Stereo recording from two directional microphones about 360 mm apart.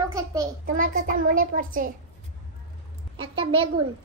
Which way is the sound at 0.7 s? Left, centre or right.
Right.